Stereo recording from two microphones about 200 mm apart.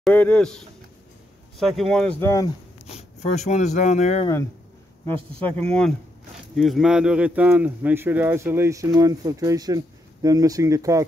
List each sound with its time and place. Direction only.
0.0 s speech: 5° left (ahead or behind)
3.2 s speech: 35° left (ahead or behind)
5.6 s speech: 5° left (ahead or behind); by 11.1 s 15° right (ahead or behind)